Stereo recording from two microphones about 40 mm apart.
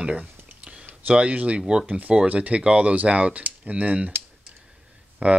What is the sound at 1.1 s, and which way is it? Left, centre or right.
Speech, right.